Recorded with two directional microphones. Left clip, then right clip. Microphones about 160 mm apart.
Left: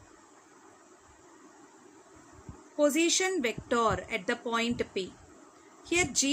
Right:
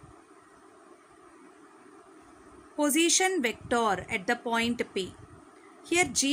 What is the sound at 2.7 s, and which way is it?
A woman's voice, 25° right (ahead or behind).